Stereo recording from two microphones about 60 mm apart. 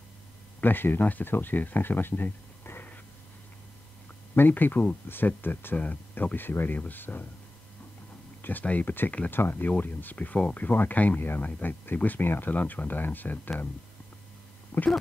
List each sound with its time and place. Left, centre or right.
0.6 s speech: left
4.4 s speech: left
8.4 s speech: left
14.7 s speech: left